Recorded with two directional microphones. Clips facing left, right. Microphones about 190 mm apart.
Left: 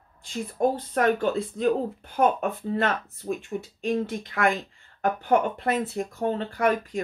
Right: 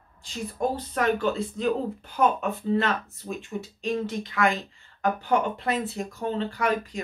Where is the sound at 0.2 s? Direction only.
50° left (ahead or behind).